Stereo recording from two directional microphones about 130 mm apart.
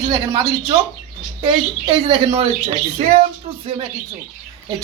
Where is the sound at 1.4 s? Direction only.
40° right (ahead or behind).